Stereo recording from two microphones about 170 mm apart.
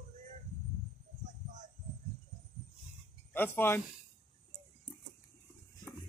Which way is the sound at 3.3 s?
10° left (ahead or behind).